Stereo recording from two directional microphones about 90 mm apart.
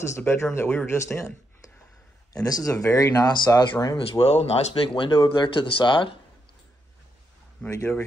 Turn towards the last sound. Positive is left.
turn(degrees=30)  # may be behind; listen again after turning